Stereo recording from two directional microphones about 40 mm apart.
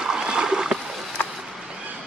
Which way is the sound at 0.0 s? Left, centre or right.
Centre.